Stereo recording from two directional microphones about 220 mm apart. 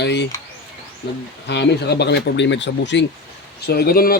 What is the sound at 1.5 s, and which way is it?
Speech, 50° left (ahead or behind).